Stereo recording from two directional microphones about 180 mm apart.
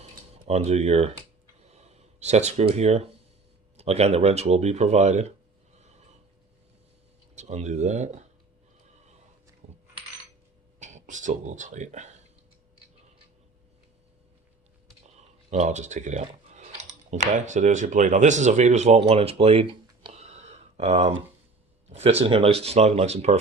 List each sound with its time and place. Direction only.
0.0 s typing: 35° right (ahead or behind)
1.6 s a sound: 35° right (ahead or behind)
3.8 s speech: 35° right (ahead or behind)
7.3 s speech: 40° right (ahead or behind)
9.6 s coin: 35° right (ahead or behind)
10.8 s speech: 40° right (ahead or behind)
15.4 s speech: 40° right (ahead or behind)